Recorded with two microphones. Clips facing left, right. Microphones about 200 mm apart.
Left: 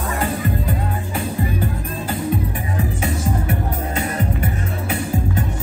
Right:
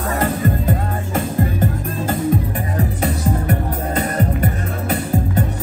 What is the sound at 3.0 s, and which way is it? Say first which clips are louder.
Music: right 2 dB; 40° right (ahead or behind).